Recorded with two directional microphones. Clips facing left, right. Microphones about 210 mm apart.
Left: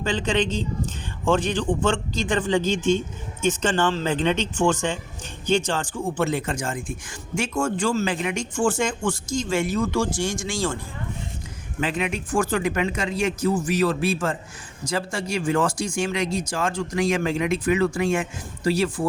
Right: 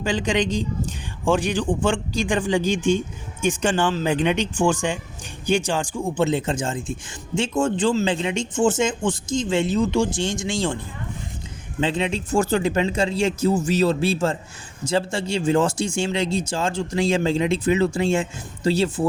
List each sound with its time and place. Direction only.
0.0 s a man's voice: 10° right (ahead or behind)
11.8 s speech: 25° right (ahead or behind)